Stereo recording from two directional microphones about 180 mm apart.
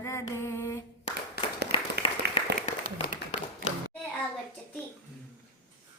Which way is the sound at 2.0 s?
30° left (ahead or behind).